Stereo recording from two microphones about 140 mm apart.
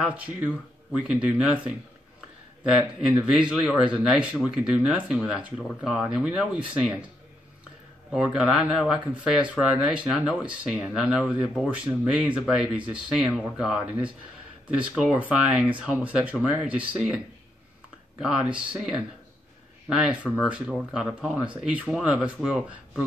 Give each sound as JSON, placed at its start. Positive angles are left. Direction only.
{"t": 0.0, "sound": "speech", "side_deg": -10}
{"t": 8.1, "sound": "speech", "side_deg": -5}
{"t": 18.2, "sound": "speech", "side_deg": -5}